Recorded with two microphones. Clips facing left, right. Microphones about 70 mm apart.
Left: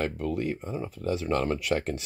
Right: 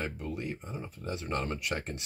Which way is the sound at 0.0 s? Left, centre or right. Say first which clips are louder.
Left 7 dB; left.